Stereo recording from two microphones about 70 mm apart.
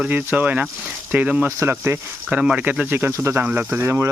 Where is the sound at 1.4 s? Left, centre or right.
Right.